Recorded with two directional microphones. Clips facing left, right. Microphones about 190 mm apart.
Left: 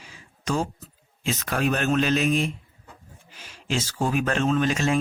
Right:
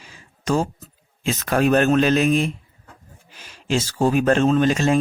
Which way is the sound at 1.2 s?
50° right (ahead or behind).